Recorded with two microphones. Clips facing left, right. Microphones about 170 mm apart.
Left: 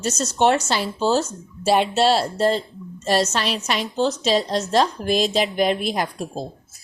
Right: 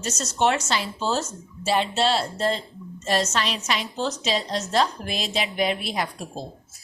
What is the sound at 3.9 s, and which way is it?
A woman's voice, 30° left (ahead or behind).